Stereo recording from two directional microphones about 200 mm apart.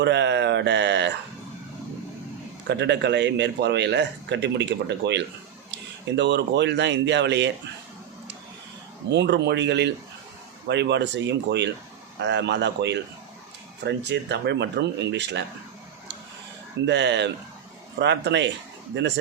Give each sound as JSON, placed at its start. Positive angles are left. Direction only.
{"t": 0.0, "sound": "speech", "side_deg": -60}
{"t": 2.6, "sound": "speech", "side_deg": -60}
{"t": 9.0, "sound": "speech", "side_deg": -60}
{"t": 16.8, "sound": "speech", "side_deg": -60}